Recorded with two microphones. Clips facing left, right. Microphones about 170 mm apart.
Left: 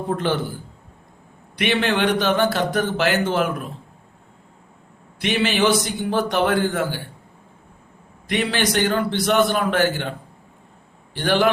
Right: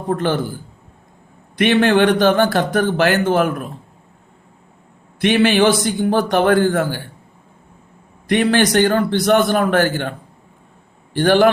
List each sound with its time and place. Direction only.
0.1 s a man's voice: 50° right (ahead or behind)
1.5 s a man's voice: 50° right (ahead or behind)
5.2 s a man's voice: 55° right (ahead or behind)
8.3 s a man's voice: 50° right (ahead or behind)